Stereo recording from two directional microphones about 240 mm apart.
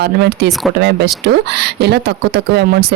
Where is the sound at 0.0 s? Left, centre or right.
Right.